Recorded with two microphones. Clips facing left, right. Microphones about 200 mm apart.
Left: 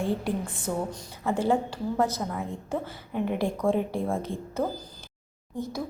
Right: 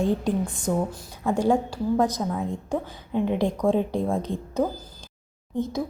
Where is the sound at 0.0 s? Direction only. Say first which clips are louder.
Right 4 dB; 15° right (ahead or behind).